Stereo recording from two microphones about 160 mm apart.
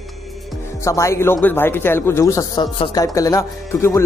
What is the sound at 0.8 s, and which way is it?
A man's voice, 20° left (ahead or behind).